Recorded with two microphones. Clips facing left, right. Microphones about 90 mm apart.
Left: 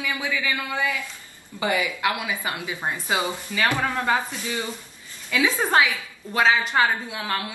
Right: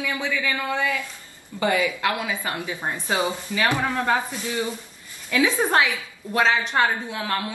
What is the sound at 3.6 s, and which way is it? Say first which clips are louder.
Speech: even; 15° right (ahead or behind).